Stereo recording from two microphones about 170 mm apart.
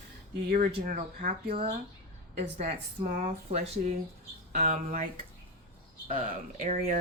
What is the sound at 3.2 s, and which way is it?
Speech, 40° right (ahead or behind).